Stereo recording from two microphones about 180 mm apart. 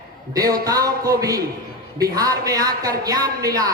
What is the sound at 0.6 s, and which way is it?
A man's voice, 20° right (ahead or behind).